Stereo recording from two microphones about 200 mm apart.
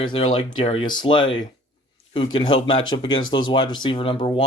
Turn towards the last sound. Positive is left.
turn(degrees=25)  # may be behind; listen again after turning